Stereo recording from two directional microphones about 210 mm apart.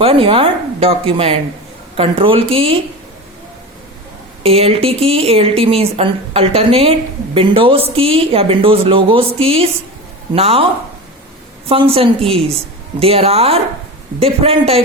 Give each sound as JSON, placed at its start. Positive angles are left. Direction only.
{"t": 0.0, "sound": "speech", "side_deg": -25}
{"t": 4.4, "sound": "speech", "side_deg": -30}
{"t": 11.7, "sound": "speech", "side_deg": -25}